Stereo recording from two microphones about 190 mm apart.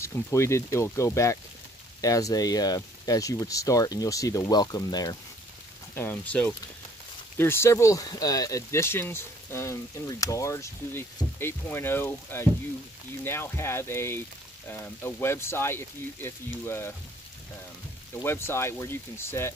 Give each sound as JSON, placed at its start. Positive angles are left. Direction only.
{"t": 0.0, "sound": "speech", "side_deg": 15}
{"t": 5.9, "sound": "speech", "side_deg": 10}
{"t": 18.2, "sound": "speech", "side_deg": 10}